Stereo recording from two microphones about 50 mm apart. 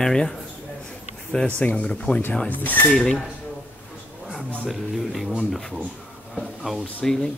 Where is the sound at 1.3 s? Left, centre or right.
Left.